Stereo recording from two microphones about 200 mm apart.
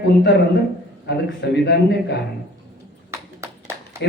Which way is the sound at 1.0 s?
60° left (ahead or behind).